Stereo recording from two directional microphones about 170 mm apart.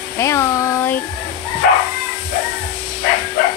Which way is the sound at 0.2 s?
15° left (ahead or behind).